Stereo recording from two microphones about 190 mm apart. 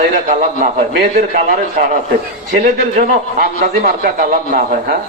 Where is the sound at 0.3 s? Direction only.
40° right (ahead or behind).